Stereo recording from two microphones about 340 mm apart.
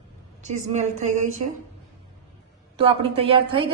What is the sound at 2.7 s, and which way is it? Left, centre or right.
Speech, centre.